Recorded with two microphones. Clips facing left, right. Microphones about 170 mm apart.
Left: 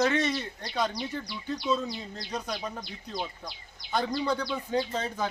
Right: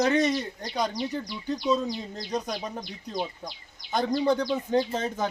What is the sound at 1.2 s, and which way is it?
Speech, 45° right (ahead or behind).